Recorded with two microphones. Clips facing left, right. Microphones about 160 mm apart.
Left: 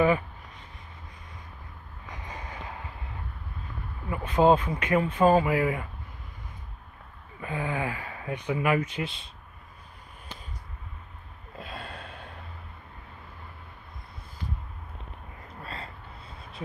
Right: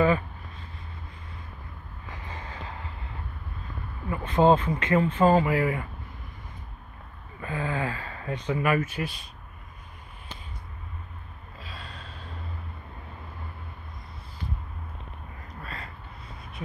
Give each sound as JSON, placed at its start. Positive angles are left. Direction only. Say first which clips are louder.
{"t": 0.0, "sound": "a sound", "louder": "even", "side_deg": 15}
{"t": 2.0, "sound": "vehicle", "louder": "even", "side_deg": 15}
{"t": 4.1, "sound": "speech", "louder": "right 1 dB", "side_deg": 10}
{"t": 7.3, "sound": "speech", "louder": "right 1 dB", "side_deg": 15}
{"t": 11.5, "sound": "gasp", "louder": "left 5 dB", "side_deg": 55}
{"t": 15.6, "sound": "a sound", "louder": "left 1 dB", "side_deg": 30}